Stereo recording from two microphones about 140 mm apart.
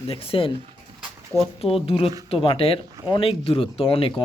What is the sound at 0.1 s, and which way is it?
Speech, 40° left (ahead or behind).